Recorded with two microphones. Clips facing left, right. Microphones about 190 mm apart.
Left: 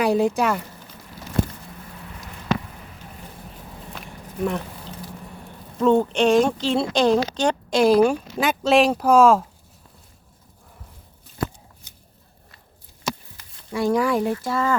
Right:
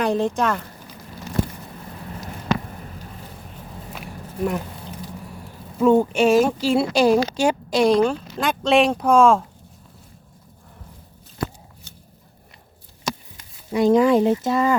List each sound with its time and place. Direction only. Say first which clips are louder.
0.0 s speech: left 1 dB; 10° left (ahead or behind)
3.9 s a sound: right 1 dB; 5° right (ahead or behind)
5.7 s speech: right 2 dB; 10° right (ahead or behind)
13.7 s speech: right 5 dB; 20° right (ahead or behind)